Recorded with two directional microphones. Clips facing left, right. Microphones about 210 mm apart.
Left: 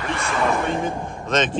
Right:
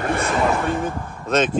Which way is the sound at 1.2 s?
10° right (ahead or behind).